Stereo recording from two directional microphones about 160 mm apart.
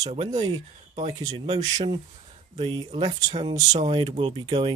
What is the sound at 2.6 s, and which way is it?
Speech, 30° right (ahead or behind).